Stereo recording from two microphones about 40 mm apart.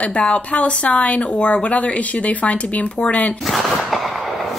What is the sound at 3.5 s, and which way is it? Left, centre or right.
Speech, centre.